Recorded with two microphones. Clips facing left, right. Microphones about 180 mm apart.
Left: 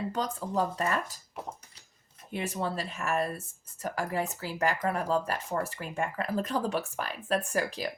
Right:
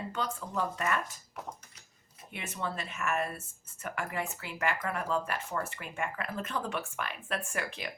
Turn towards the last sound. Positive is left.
turn(degrees=35)  # may be behind; listen again after turning